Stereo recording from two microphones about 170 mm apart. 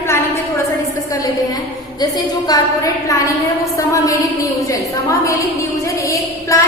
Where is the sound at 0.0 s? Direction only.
15° left (ahead or behind).